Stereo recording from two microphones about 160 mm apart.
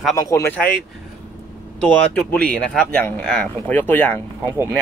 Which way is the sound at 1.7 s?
5° left (ahead or behind).